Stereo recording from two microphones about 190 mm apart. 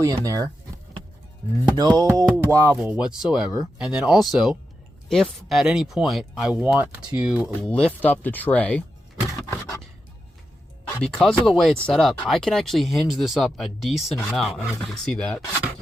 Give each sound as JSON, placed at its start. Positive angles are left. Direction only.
{"t": 0.0, "sound": "speech", "side_deg": -20}
{"t": 1.7, "sound": "a sound", "side_deg": -20}
{"t": 2.4, "sound": "speech", "side_deg": -15}
{"t": 7.6, "sound": "speech", "side_deg": 5}
{"t": 10.8, "sound": "speech", "side_deg": 5}